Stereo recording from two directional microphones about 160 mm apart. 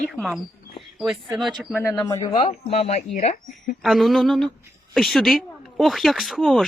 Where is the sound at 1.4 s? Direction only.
Centre (ahead or behind).